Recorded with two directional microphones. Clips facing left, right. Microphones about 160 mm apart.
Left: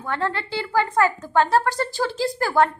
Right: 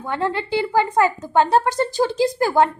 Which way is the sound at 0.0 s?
15° right (ahead or behind).